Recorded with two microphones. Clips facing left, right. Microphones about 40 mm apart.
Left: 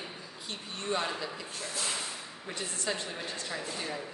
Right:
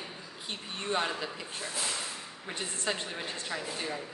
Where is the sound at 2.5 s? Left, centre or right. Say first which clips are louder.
Right 1 dB; right.